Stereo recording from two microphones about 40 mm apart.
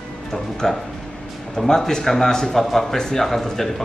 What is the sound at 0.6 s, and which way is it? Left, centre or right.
A man's voice, centre.